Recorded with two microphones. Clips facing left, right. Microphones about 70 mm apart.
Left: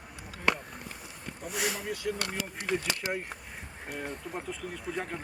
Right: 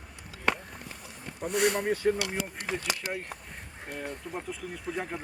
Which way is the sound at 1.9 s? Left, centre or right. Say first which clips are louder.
Right 7 dB; right.